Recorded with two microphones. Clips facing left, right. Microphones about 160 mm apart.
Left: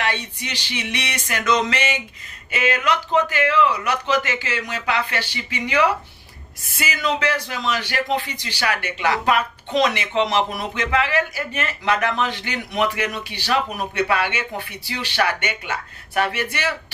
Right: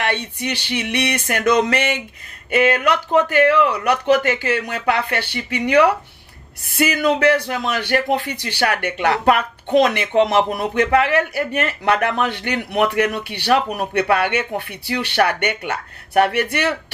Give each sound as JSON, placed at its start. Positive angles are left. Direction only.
{"t": 0.0, "sound": "speech", "side_deg": -60}